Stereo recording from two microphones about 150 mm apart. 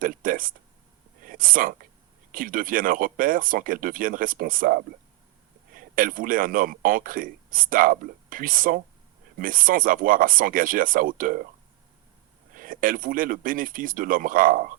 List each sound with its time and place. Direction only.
0.0 s a sound: 65° right (ahead or behind)
2.3 s speech: 65° right (ahead or behind)
12.5 s speech: 65° right (ahead or behind)